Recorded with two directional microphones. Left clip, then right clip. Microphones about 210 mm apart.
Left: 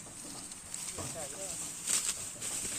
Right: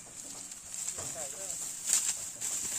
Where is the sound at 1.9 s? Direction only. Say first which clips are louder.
Right 2 dB; 40° right (ahead or behind).